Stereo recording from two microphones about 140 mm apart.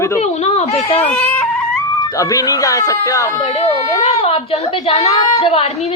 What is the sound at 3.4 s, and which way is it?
A child's voice, 45° left (ahead or behind).